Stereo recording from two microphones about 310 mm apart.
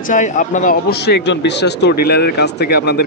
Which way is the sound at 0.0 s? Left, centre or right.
Left.